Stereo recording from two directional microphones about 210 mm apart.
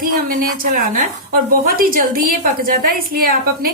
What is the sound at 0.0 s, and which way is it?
A woman's voice, 40° right (ahead or behind).